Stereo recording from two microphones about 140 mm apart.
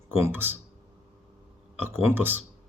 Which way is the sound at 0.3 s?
15° right (ahead or behind).